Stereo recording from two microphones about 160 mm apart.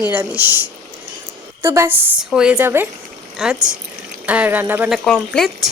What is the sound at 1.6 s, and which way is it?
Speech, 15° right (ahead or behind).